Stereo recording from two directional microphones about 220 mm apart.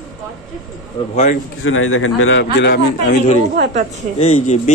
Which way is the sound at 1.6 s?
65° left (ahead or behind).